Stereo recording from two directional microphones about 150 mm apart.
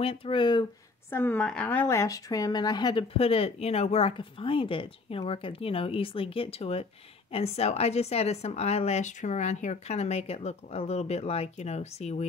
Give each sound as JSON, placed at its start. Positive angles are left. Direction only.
{"t": 0.0, "sound": "a woman's voice", "side_deg": 40}
{"t": 1.1, "sound": "a woman's voice", "side_deg": 15}